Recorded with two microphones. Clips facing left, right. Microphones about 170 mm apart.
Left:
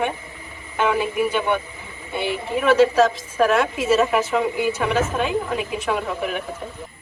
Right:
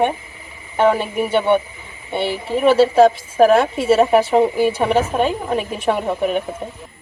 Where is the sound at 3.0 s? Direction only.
30° right (ahead or behind).